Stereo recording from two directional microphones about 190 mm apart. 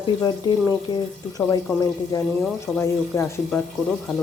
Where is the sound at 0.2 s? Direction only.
20° left (ahead or behind).